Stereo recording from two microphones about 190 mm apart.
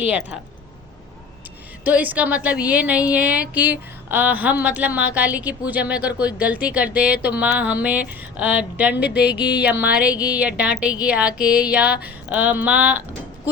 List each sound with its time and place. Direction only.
0.0 s a woman's voice: 5° right (ahead or behind)
1.8 s a woman's voice: 10° right (ahead or behind)
9.0 s music: 60° left (ahead or behind)
9.8 s a woman's voice: 5° right (ahead or behind)